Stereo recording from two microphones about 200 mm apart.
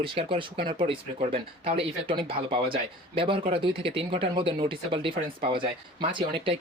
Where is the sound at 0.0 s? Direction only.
25° right (ahead or behind).